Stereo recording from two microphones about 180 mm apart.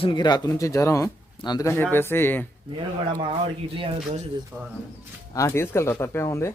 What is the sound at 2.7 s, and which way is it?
Speech, 25° right (ahead or behind).